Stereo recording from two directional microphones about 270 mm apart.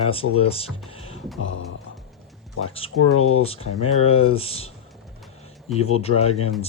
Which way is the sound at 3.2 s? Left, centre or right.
Left.